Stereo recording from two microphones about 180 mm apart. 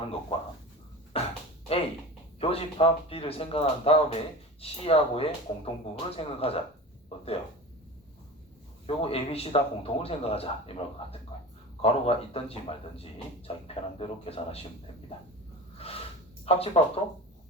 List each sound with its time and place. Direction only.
0.3 s speech: 30° left (ahead or behind)
1.1 s a sound: 35° left (ahead or behind)
2.4 s speech: 35° left (ahead or behind)
7.1 s a sound: 30° left (ahead or behind)
8.9 s speech: 35° left (ahead or behind)
16.5 s speech: 35° left (ahead or behind)